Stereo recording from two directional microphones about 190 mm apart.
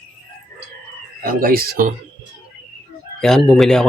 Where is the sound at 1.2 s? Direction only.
50° right (ahead or behind).